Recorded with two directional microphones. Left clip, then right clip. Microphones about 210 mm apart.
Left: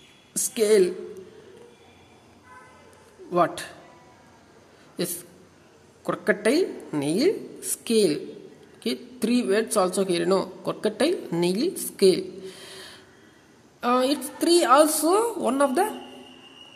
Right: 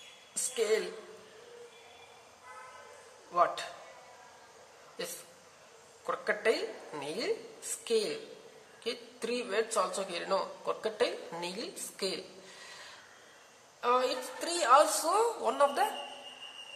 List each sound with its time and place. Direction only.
0.4 s a woman's voice: 45° left (ahead or behind)
3.3 s a woman's voice: 45° left (ahead or behind)
5.0 s a woman's voice: 45° left (ahead or behind)